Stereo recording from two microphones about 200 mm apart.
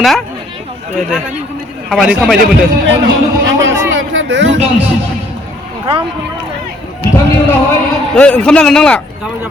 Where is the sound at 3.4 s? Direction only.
70° right (ahead or behind).